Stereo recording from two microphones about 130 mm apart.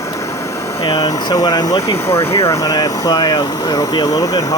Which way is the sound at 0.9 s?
30° left (ahead or behind).